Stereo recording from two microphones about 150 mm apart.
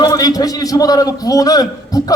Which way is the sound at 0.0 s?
25° left (ahead or behind).